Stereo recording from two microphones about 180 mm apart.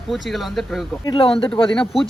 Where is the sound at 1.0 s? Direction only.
30° left (ahead or behind).